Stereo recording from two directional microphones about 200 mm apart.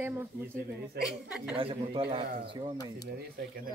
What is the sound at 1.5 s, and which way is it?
Speech, 25° right (ahead or behind).